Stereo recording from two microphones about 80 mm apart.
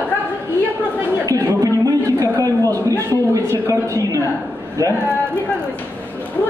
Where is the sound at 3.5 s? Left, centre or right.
Right.